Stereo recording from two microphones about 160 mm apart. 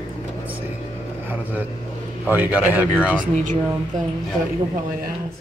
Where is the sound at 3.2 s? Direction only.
50° right (ahead or behind).